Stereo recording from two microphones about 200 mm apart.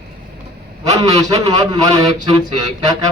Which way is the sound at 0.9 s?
20° right (ahead or behind).